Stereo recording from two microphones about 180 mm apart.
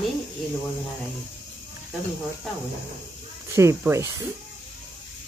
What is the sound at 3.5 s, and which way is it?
Speech, 15° right (ahead or behind).